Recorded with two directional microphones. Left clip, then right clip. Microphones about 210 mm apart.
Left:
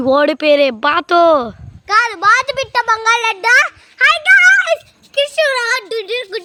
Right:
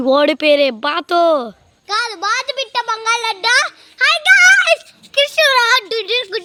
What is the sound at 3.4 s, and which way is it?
Speech, 45° left (ahead or behind).